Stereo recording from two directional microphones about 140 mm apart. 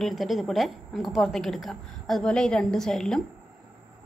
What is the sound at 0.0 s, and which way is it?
A woman's voice, centre (ahead or behind).